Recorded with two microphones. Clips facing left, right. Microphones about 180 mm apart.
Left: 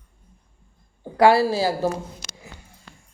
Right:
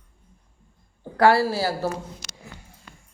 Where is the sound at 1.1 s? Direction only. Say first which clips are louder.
Left 2 dB; 15° left (ahead or behind).